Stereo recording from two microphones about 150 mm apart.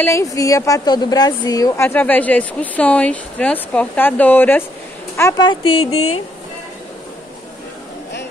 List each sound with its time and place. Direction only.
0.0 s a woman's voice: 20° left (ahead or behind)
5.5 s speech: 40° left (ahead or behind)